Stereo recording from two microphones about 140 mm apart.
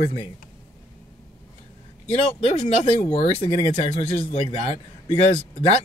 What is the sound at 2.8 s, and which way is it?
Speech, 45° left (ahead or behind).